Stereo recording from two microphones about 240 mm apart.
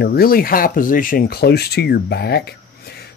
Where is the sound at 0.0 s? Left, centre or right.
Left.